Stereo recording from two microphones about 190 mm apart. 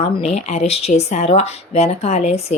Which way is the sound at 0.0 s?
30° left (ahead or behind).